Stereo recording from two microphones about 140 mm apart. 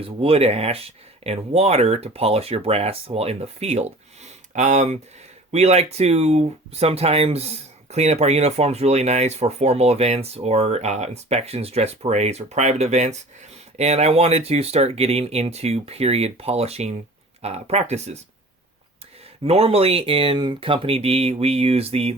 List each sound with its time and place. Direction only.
0.0 s speech: 45° right (ahead or behind)
19.5 s speech: 45° right (ahead or behind)